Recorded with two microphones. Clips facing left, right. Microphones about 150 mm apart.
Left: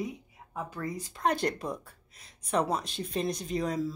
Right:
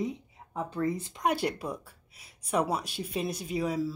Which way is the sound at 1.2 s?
10° right (ahead or behind).